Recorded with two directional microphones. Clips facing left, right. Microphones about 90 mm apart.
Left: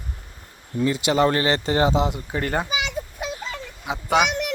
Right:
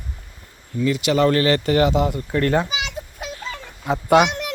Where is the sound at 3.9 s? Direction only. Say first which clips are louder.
Right 5 dB; centre (ahead or behind).